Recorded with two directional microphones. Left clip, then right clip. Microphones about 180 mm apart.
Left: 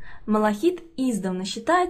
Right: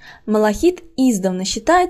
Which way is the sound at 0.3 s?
35° right (ahead or behind).